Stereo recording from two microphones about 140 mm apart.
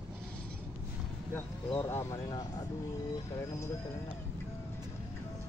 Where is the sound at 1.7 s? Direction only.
20° left (ahead or behind).